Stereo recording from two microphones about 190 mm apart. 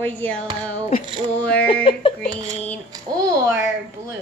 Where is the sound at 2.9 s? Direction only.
20° right (ahead or behind).